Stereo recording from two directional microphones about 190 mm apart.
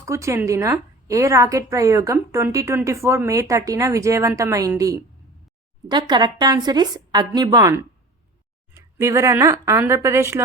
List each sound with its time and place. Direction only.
0.0 s a woman's voice: 15° right (ahead or behind)